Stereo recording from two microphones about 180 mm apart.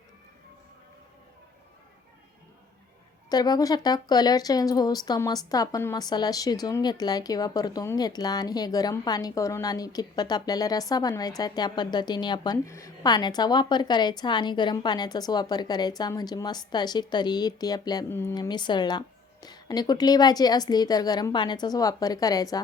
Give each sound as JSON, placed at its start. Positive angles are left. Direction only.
{"t": 3.2, "sound": "speech", "side_deg": 20}